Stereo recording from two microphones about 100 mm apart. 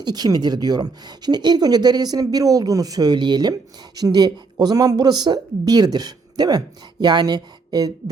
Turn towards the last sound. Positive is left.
turn(degrees=-40)  # may be behind; listen again after turning